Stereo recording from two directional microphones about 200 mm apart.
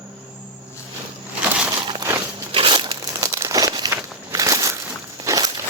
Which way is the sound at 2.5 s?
25° right (ahead or behind).